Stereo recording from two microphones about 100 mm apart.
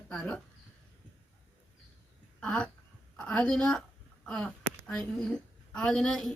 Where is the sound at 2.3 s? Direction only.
10° left (ahead or behind).